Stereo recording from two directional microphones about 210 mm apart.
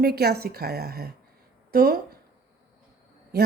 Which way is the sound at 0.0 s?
50° right (ahead or behind).